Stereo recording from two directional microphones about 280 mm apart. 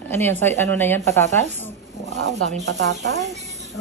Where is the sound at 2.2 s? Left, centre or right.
Right.